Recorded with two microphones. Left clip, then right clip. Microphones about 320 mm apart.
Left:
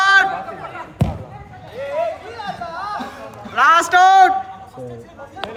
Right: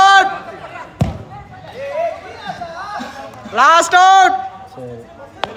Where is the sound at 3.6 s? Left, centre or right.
Centre.